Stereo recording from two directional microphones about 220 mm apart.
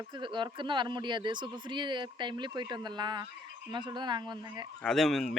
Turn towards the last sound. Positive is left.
turn(degrees=0)  # may be behind; listen again after turning